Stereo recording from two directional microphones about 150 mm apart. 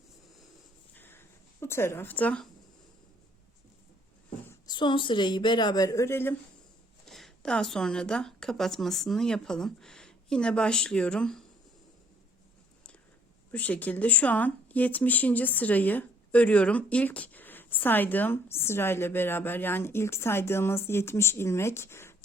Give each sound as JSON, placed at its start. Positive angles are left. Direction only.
{"t": 0.9, "sound": "a sound", "side_deg": 15}
{"t": 1.6, "sound": "speech", "side_deg": 15}
{"t": 4.6, "sound": "speech", "side_deg": 30}
{"t": 7.0, "sound": "speech", "side_deg": 0}
{"t": 13.5, "sound": "speech", "side_deg": 10}